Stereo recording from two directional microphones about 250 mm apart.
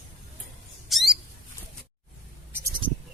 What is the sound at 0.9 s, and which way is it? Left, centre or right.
Squawk, centre.